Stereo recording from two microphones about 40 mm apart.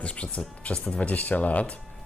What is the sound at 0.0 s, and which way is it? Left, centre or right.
Speech, left.